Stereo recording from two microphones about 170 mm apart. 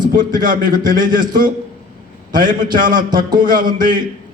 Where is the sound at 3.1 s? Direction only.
25° right (ahead or behind).